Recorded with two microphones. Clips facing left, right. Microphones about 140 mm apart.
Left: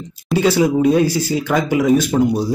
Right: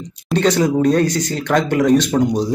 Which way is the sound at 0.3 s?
10° left (ahead or behind).